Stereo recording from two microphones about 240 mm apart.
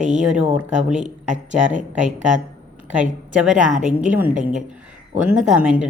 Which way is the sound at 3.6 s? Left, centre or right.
Right.